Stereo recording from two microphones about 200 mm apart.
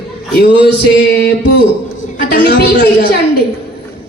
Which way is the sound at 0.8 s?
55° left (ahead or behind).